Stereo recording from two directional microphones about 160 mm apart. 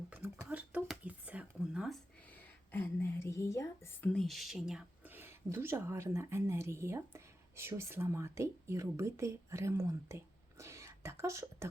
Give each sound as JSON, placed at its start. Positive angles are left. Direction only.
{"t": 0.1, "sound": "whispering", "side_deg": -10}
{"t": 2.3, "sound": "a woman's voice", "side_deg": 15}